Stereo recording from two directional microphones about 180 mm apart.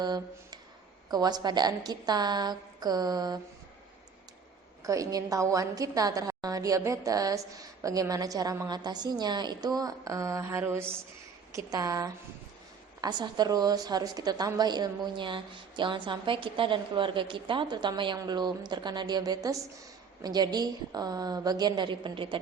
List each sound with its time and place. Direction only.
0.0 s a woman's voice: 20° right (ahead or behind)
4.8 s a woman's voice: 20° right (ahead or behind)